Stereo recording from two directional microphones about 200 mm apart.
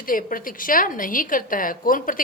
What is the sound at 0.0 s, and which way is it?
A woman's voice, 45° left (ahead or behind).